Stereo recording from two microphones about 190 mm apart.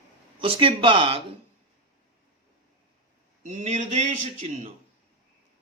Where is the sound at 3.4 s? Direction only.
40° right (ahead or behind).